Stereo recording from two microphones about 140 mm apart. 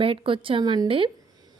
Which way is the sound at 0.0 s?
40° right (ahead or behind).